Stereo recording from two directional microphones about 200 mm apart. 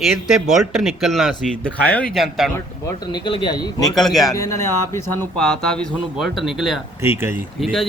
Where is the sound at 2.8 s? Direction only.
20° left (ahead or behind).